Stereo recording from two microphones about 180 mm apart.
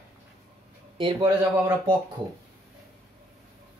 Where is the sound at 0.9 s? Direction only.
25° right (ahead or behind).